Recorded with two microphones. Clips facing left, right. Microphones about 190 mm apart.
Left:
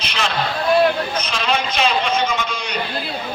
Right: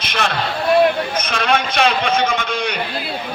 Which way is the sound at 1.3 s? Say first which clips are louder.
Right 4 dB; 60° right (ahead or behind).